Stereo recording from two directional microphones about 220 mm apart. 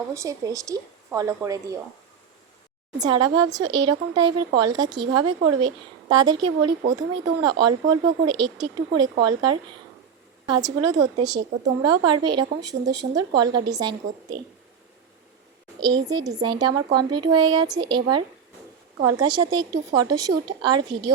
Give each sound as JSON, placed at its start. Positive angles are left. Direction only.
{"t": 0.1, "sound": "a woman's voice", "side_deg": -15}
{"t": 3.0, "sound": "a woman's voice", "side_deg": -20}
{"t": 15.9, "sound": "a woman's voice", "side_deg": -20}